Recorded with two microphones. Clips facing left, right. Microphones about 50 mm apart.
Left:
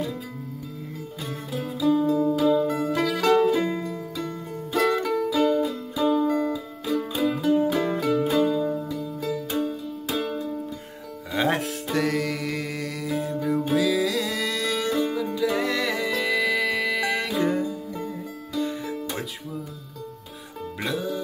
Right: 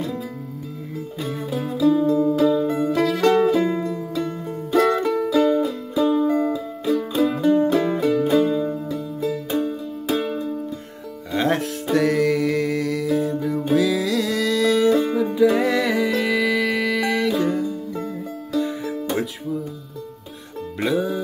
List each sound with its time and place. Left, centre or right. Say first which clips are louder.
1.2 s music: right 5 dB; centre
4.7 s music: right 4 dB; centre
6.5 s music: right 5 dB; centre
9.6 s music: right 3 dB; centre
11.3 s music: right 3 dB; centre
18.6 s music: right 3 dB; centre
20.8 s music: right 7 dB; centre